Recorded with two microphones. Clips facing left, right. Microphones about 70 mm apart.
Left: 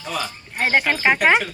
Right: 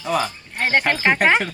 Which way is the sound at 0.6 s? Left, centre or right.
Centre.